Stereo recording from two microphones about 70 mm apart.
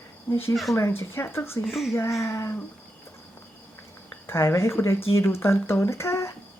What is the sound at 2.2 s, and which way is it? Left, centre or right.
Speech, left.